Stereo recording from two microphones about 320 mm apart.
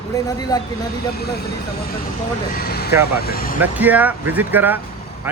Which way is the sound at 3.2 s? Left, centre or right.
Left.